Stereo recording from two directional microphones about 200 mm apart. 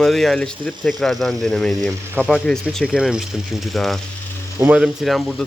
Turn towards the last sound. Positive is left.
turn(degrees=0)  # may be behind; listen again after turning